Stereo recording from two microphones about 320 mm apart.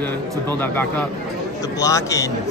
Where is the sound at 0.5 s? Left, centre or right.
Centre.